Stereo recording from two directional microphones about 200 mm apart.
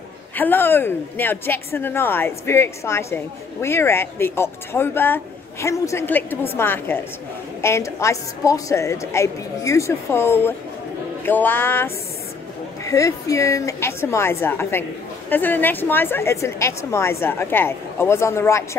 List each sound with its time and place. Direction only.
0.4 s a woman's voice: 10° left (ahead or behind)